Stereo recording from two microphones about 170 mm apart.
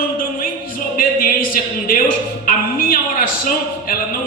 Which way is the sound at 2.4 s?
55° left (ahead or behind).